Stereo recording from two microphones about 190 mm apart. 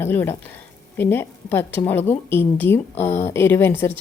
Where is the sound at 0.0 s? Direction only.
10° left (ahead or behind).